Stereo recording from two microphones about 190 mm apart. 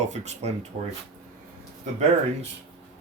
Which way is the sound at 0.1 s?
35° right (ahead or behind).